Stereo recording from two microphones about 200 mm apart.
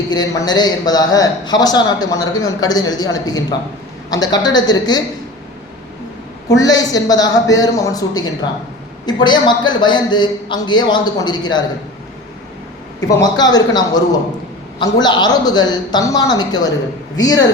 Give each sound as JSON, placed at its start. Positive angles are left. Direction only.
{"t": 0.1, "sound": "a man's voice", "side_deg": 20}
{"t": 6.5, "sound": "a man's voice", "side_deg": 20}
{"t": 13.0, "sound": "a man's voice", "side_deg": 15}